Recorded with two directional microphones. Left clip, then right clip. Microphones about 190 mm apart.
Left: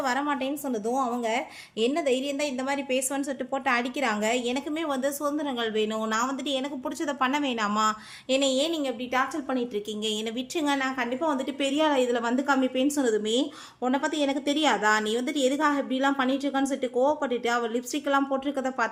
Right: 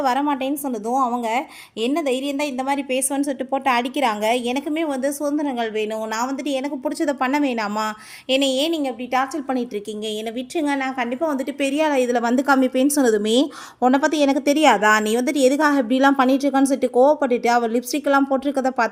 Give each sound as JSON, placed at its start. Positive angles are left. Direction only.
{"t": 0.0, "sound": "a woman's voice", "side_deg": -35}
{"t": 10.5, "sound": "a woman's voice", "side_deg": -20}